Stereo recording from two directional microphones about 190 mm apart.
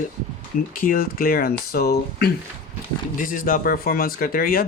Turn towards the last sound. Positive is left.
turn(degrees=50)  # may be behind; listen again after turning